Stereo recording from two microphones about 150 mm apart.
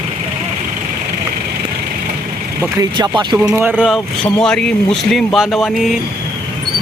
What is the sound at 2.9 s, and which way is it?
Speech, 30° right (ahead or behind).